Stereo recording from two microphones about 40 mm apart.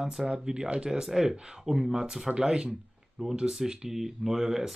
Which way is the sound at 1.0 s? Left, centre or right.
Centre.